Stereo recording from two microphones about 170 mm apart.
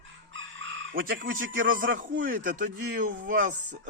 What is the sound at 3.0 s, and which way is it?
Speech, 50° right (ahead or behind).